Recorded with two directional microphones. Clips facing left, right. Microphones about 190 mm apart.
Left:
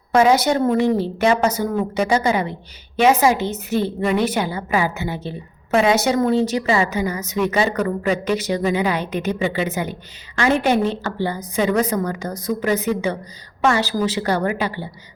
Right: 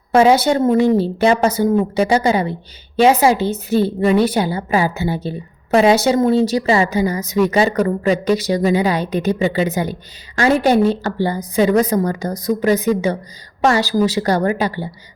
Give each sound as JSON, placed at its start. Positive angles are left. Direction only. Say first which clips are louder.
{"t": 0.1, "sound": "a woman's voice", "louder": "right 3 dB", "side_deg": -30}